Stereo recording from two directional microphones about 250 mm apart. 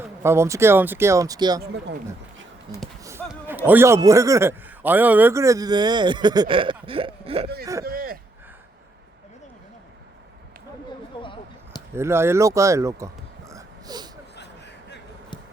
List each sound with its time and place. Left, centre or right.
0.0 s speech: centre
3.0 s a man's voice: centre
7.9 s a sound: right
11.2 s a sound: centre
11.9 s speech: centre
13.5 s wheeze: centre